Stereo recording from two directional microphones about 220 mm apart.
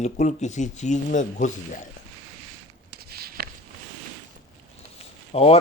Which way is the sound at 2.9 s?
45° right (ahead or behind).